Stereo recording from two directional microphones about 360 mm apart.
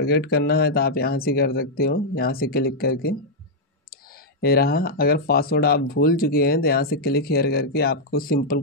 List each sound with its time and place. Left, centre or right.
0.0 s speech: left
4.4 s speech: left